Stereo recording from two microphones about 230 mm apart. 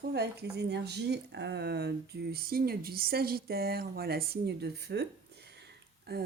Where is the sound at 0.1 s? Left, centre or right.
Right.